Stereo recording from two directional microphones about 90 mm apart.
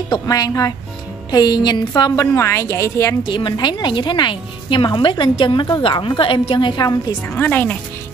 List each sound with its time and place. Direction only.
0.3 s a woman's voice: 40° left (ahead or behind)
3.3 s a woman's voice: 60° left (ahead or behind)
7.2 s speech: 20° left (ahead or behind)